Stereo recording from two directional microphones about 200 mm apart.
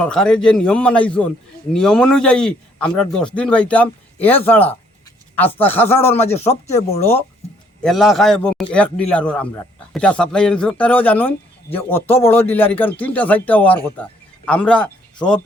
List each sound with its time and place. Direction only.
0.0 s a man's voice: 5° left (ahead or behind)
6.2 s speech: 30° left (ahead or behind)
7.9 s a man's voice: centre (ahead or behind)